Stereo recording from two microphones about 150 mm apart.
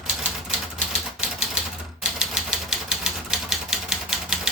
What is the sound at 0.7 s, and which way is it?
Typewriter, 5° right (ahead or behind).